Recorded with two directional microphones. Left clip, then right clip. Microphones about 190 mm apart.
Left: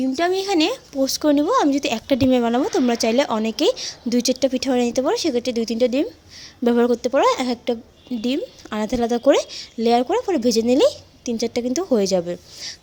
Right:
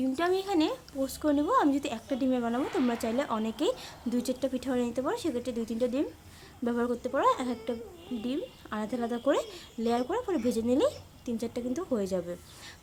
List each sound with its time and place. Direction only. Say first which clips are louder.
0.2 s speech: left 9 dB; 30° left (ahead or behind)